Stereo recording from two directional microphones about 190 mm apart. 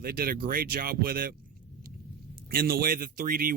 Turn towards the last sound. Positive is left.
turn(degrees=-50)  # may be behind; listen again after turning